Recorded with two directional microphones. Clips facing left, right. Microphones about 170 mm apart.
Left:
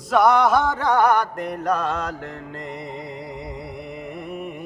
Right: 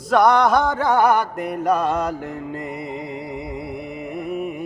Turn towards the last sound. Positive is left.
turn(degrees=-5)  # may be behind; listen again after turning